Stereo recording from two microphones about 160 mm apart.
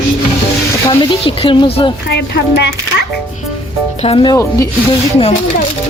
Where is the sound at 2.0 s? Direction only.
90° left.